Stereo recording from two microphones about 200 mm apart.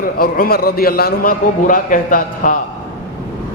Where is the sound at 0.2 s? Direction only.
50° left (ahead or behind).